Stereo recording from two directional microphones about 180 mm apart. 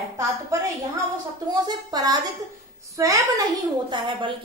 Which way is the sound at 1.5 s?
20° right (ahead or behind).